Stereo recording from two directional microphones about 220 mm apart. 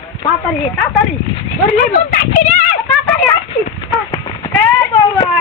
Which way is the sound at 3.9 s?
Centre (ahead or behind).